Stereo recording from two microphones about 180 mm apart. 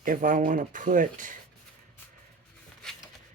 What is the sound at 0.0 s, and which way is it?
Speech, 50° right (ahead or behind).